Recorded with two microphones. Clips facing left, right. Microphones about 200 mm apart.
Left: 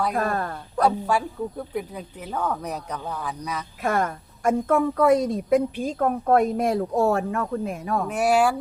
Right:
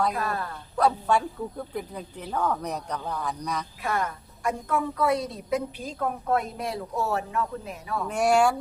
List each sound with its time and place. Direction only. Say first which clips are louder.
0.1 s a woman's voice: left 5 dB; 50° left (ahead or behind)
0.8 s speech: left 1 dB; 10° left (ahead or behind)
3.8 s a woman's voice: left 6 dB; 45° left (ahead or behind)
8.0 s speech: even; 5° left (ahead or behind)